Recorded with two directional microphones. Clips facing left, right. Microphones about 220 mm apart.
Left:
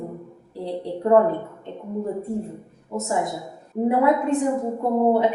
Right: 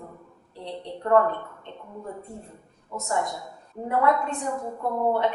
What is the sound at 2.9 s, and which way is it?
A woman's voice, 10° left (ahead or behind).